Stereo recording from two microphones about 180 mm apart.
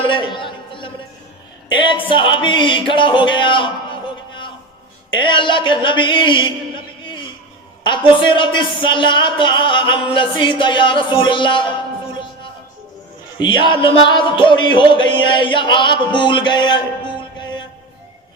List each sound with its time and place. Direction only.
0.0 s a sound: 25° left (ahead or behind)
1.7 s music: 25° left (ahead or behind)
5.1 s music: 25° left (ahead or behind)
13.4 s music: 25° left (ahead or behind)